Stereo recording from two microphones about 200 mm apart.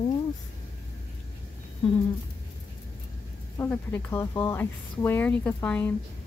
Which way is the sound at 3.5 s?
10° left (ahead or behind).